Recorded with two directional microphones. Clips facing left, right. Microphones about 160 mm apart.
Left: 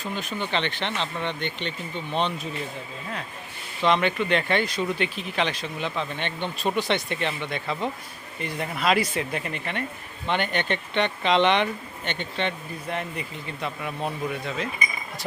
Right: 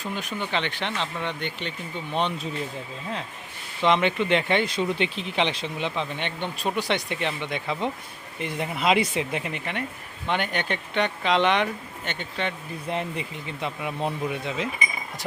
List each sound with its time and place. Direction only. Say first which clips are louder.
0.0 s speech: even; 15° right (ahead or behind)
3.8 s speech: right 1 dB; 20° right (ahead or behind)
12.9 s speech: right 2 dB; 25° right (ahead or behind)